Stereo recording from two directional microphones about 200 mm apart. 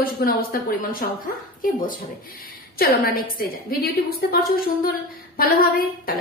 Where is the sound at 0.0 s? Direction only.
45° left (ahead or behind).